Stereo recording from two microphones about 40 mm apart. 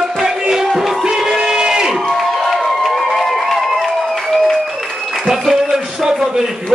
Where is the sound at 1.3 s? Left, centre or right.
Centre.